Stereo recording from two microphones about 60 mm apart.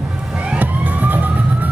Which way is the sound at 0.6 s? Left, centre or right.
Right.